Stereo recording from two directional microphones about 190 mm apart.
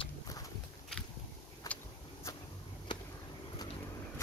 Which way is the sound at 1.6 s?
20° left (ahead or behind).